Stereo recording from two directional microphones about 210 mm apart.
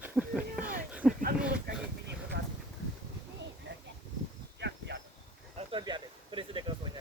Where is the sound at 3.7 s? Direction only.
60° right (ahead or behind).